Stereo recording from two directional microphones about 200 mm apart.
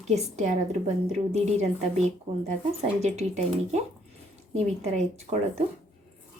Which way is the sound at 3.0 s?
35° right (ahead or behind).